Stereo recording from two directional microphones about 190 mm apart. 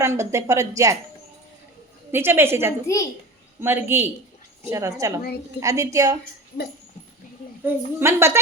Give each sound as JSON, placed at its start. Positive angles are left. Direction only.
{"t": 0.0, "sound": "speech", "side_deg": -15}
{"t": 2.1, "sound": "speech", "side_deg": -10}
{"t": 2.8, "sound": "a child's voice", "side_deg": 15}
{"t": 3.6, "sound": "speech", "side_deg": -10}
{"t": 7.6, "sound": "speech", "side_deg": -10}